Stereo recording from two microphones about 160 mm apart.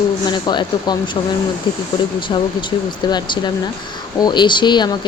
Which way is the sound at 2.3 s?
30° left (ahead or behind).